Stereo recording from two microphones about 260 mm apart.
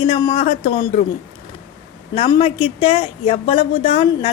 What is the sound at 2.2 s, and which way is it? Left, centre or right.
A woman's voice, centre.